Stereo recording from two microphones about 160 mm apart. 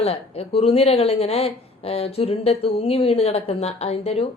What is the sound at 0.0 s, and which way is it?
A woman's voice, 40° left (ahead or behind).